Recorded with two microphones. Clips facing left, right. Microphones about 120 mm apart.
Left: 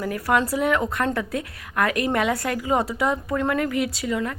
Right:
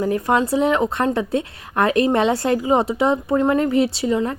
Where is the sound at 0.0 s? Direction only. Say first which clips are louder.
Right 4 dB; 25° right (ahead or behind).